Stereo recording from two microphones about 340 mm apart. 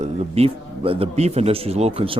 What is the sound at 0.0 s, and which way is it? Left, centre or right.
Speech, centre.